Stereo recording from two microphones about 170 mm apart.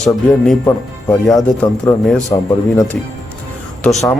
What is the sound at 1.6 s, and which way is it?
Speech, 5° left (ahead or behind).